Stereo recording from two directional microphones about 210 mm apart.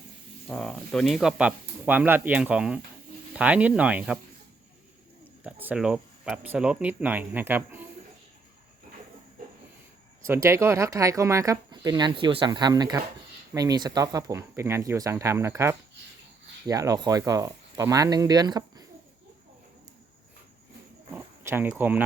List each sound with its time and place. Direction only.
0.4 s speech: 5° left (ahead or behind)
5.4 s speech: 10° right (ahead or behind)
10.2 s speech: 10° right (ahead or behind)
21.1 s a sound: 10° right (ahead or behind)